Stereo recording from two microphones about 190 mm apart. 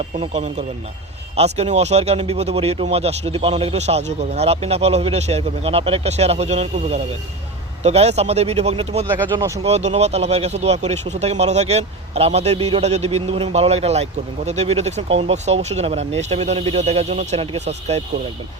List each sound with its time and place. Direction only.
0.2 s speech: 35° right (ahead or behind)